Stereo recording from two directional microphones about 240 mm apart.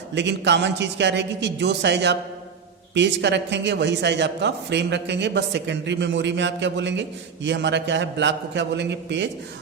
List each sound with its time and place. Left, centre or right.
0.1 s a man's voice: right